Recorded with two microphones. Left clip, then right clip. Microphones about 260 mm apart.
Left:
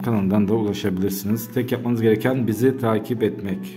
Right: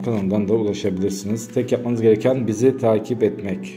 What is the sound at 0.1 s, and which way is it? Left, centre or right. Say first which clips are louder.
A man's voice: right 1 dB; left.